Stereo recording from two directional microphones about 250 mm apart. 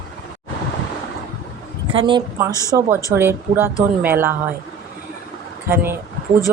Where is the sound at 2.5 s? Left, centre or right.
Centre.